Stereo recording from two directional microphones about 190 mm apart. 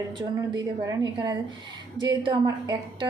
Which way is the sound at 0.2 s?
25° right (ahead or behind).